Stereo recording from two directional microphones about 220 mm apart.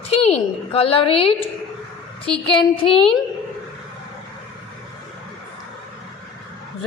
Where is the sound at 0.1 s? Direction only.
30° left (ahead or behind).